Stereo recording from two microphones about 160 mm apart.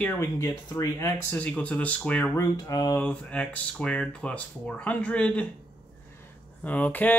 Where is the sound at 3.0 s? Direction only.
10° left (ahead or behind).